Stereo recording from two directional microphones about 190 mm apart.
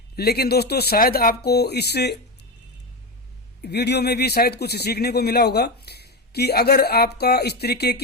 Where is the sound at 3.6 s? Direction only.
60° left (ahead or behind).